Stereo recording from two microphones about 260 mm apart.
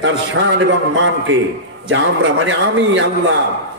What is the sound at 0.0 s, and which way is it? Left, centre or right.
A man's voice, right.